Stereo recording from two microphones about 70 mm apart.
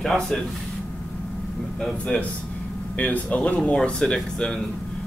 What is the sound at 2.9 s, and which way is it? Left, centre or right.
Speech, left.